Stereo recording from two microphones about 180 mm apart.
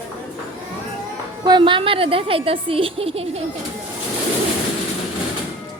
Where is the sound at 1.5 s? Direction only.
25° right (ahead or behind).